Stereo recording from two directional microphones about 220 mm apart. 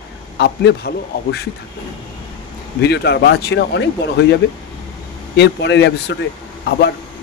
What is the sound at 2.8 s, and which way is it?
Speech, 50° left (ahead or behind).